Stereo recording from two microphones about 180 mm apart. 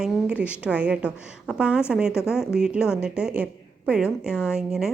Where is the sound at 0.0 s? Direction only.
5° right (ahead or behind).